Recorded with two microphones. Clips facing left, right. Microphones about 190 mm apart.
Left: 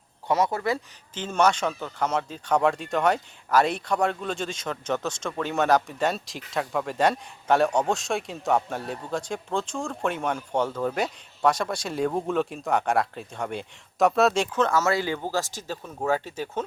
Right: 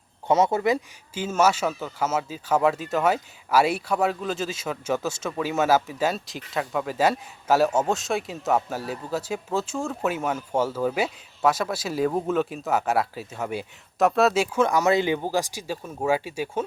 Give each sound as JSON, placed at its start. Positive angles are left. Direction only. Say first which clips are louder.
{"t": 0.3, "sound": "speech", "louder": "right 4 dB", "side_deg": -25}
{"t": 1.1, "sound": "speech", "louder": "right 1 dB", "side_deg": -5}